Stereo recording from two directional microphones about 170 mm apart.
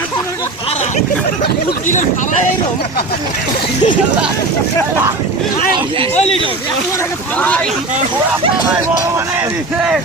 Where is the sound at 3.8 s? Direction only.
25° left (ahead or behind).